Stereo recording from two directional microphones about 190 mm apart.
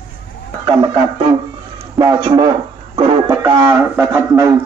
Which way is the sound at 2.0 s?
20° right (ahead or behind).